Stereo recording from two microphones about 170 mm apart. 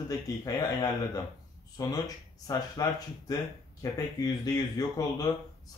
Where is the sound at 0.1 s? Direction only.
20° left (ahead or behind).